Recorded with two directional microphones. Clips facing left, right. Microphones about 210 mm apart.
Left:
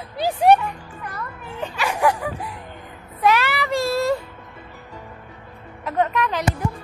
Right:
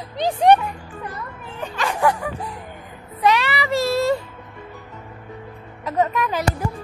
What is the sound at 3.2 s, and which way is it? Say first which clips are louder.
Speech: even; centre (ahead or behind).